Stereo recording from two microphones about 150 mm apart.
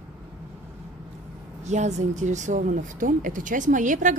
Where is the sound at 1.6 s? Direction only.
50° right (ahead or behind).